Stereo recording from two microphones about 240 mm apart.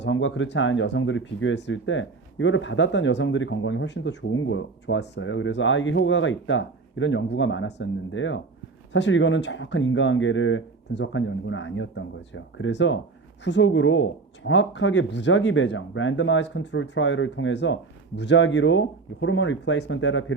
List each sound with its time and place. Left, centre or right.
0.0 s speech: left